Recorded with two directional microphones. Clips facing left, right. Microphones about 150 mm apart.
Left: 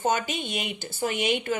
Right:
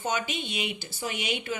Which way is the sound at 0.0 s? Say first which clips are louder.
Left 4 dB; 45° left (ahead or behind).